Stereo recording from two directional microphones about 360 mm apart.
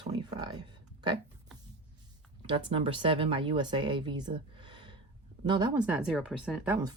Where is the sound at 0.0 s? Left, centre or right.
Centre.